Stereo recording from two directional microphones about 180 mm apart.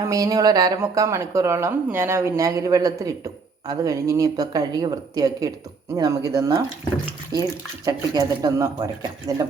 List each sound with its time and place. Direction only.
0.0 s speech: 20° right (ahead or behind)
7.9 s speech: 20° right (ahead or behind)